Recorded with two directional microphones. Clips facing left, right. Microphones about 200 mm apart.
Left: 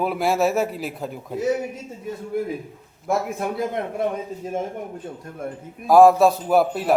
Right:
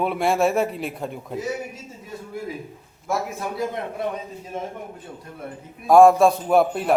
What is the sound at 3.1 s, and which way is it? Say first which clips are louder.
Speech: left 3 dB; 55° left (ahead or behind).